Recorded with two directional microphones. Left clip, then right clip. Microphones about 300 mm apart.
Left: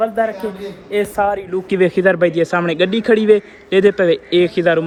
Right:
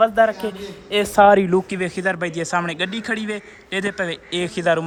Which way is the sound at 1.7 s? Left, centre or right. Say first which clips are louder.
Left 9 dB; centre.